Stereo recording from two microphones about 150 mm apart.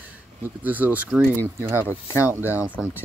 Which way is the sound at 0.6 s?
10° right (ahead or behind).